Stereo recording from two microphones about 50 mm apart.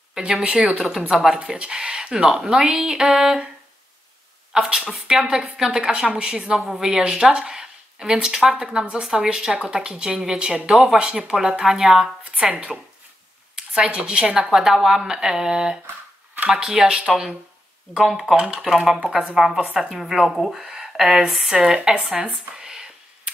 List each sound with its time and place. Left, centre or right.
0.3 s a woman's voice: centre
1.4 s a woman's voice: centre
4.5 s a woman's voice: centre
12.4 s a woman's voice: centre
21.5 s a woman's voice: centre
22.2 s a sound: centre